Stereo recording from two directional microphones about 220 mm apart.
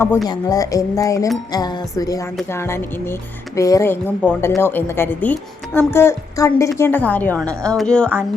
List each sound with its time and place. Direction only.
0.3 s a woman's voice: 15° left (ahead or behind)